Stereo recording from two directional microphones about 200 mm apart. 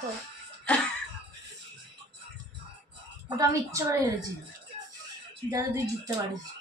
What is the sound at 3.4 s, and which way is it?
Speech, 15° right (ahead or behind).